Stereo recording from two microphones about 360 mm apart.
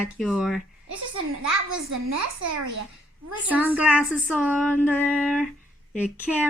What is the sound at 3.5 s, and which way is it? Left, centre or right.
Speech, centre.